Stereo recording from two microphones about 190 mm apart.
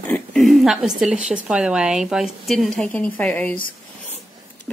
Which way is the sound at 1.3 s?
5° right (ahead or behind).